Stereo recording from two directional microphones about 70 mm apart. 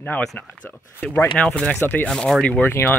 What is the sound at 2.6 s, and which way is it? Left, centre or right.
Speech, left.